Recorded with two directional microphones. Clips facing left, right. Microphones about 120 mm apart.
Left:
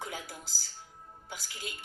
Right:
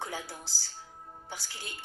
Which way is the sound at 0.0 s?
30° right (ahead or behind).